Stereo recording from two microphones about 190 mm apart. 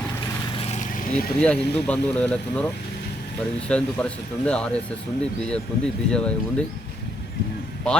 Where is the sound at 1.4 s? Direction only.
5° left (ahead or behind).